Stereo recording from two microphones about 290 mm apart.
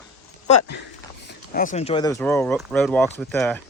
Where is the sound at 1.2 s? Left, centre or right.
Left.